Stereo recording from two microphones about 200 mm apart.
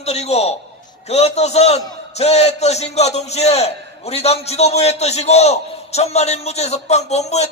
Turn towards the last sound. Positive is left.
turn(degrees=35)  # may be behind; listen again after turning